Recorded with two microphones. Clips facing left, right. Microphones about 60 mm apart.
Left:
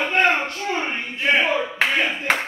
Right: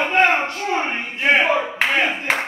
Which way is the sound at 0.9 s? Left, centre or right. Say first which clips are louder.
Right 2 dB; right.